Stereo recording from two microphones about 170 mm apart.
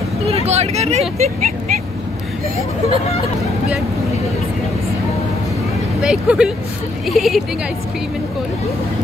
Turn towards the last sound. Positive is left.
turn(degrees=0)  # may be behind; listen again after turning